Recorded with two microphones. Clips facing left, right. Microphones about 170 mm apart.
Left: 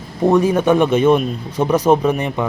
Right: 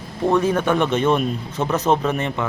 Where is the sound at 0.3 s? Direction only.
15° left (ahead or behind).